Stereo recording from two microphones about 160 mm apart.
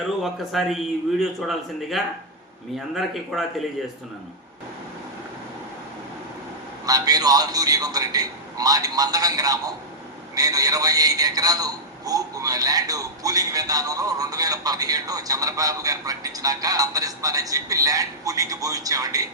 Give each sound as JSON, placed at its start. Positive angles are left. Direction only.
{"t": 0.2, "sound": "speech", "side_deg": 0}
{"t": 6.8, "sound": "a man's voice", "side_deg": -25}